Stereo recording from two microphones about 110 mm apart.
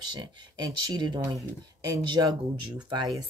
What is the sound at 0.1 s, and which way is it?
Speech, 40° right (ahead or behind).